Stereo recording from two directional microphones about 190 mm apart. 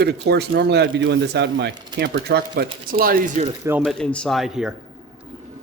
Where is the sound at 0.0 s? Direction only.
60° right (ahead or behind).